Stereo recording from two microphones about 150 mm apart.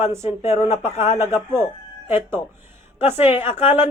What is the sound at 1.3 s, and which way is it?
Speech, 15° right (ahead or behind).